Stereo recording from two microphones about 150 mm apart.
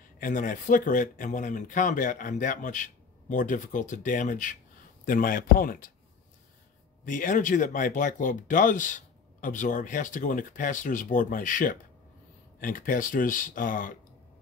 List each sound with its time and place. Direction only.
0.2 s speech: 60° left (ahead or behind)
7.1 s speech: 60° left (ahead or behind)